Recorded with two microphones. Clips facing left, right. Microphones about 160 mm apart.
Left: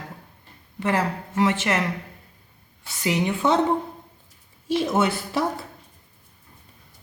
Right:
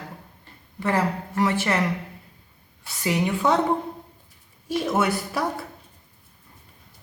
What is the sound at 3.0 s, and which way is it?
Speech, 20° left (ahead or behind).